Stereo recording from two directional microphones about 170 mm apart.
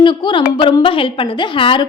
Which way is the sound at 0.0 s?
25° left (ahead or behind).